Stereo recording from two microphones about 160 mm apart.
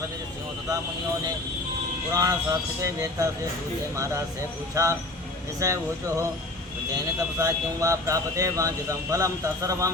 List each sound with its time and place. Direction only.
2.1 s speech: 20° right (ahead or behind)